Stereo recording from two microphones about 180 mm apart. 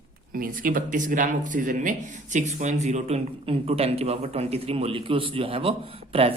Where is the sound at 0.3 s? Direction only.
55° right (ahead or behind).